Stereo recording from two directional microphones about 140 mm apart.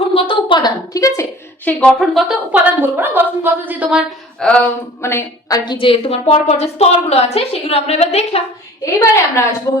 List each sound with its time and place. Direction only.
0.1 s a sound: 40° left (ahead or behind); by 1.7 s 20° left (ahead or behind)
1.8 s speech: 5° left (ahead or behind)
3.0 s a woman's voice: 15° right (ahead or behind)
4.4 s a sound: 5° left (ahead or behind)
5.0 s a woman's voice: 20° left (ahead or behind)
5.6 s a woman's voice: 40° left (ahead or behind)
8.8 s a woman's voice: 20° left (ahead or behind)